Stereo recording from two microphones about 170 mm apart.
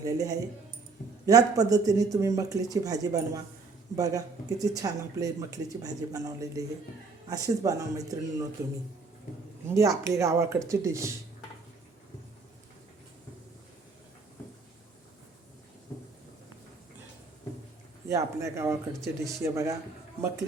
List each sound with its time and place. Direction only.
0.0 s speech: 20° right (ahead or behind)
9.6 s speech: 20° right (ahead or behind)
18.1 s speech: 15° right (ahead or behind)